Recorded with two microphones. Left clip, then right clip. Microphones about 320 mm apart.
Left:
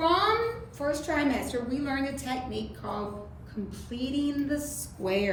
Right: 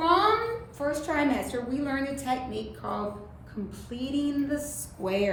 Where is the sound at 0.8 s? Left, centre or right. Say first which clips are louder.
Right 1 dB; centre.